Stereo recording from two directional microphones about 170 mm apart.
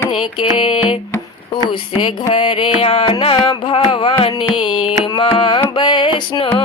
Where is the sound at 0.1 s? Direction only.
30° left (ahead or behind).